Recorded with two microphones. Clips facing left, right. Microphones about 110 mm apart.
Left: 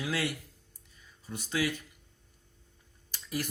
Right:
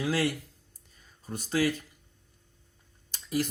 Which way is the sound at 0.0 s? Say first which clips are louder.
Right 5 dB; 35° right (ahead or behind).